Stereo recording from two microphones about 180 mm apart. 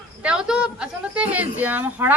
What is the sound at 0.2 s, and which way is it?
A woman's voice, 5° right (ahead or behind).